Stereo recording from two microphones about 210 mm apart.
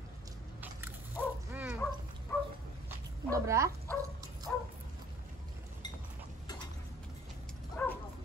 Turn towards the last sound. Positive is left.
turn(degrees=10)  # may be behind; listen again after turning